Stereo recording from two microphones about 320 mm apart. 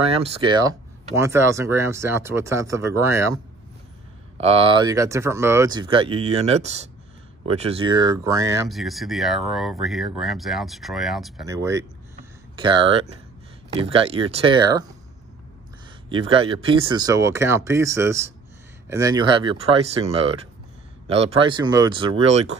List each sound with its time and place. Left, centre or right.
0.0 s speech: centre
4.5 s speech: centre
8.6 s speech: centre
16.1 s speech: centre